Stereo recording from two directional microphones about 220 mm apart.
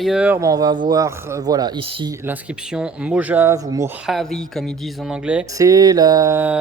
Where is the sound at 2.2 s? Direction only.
5° right (ahead or behind).